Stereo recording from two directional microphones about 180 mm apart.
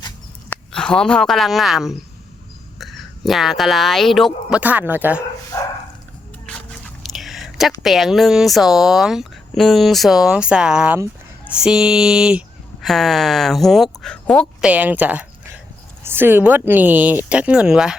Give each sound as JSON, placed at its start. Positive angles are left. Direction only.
{"t": 0.5, "sound": "speech", "side_deg": 5}
{"t": 5.5, "sound": "dog", "side_deg": 20}
{"t": 6.4, "sound": "a sound", "side_deg": 5}
{"t": 7.8, "sound": "speech", "side_deg": 0}